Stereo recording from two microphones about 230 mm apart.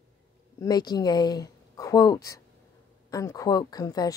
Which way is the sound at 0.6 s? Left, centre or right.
Centre.